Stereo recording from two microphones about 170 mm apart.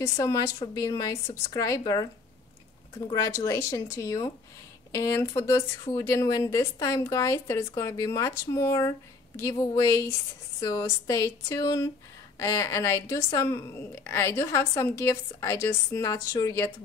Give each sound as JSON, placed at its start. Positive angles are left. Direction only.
{"t": 0.0, "sound": "speech", "side_deg": 15}
{"t": 3.1, "sound": "a woman's voice", "side_deg": 15}